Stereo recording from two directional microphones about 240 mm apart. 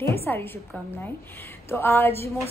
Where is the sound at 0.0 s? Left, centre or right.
Centre.